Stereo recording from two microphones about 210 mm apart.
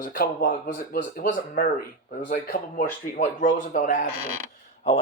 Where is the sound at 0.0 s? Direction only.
40° left (ahead or behind).